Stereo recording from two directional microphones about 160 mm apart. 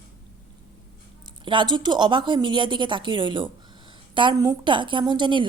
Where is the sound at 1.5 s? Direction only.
30° right (ahead or behind).